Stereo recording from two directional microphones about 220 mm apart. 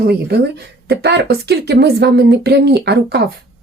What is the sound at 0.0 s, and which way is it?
Speech, 45° right (ahead or behind).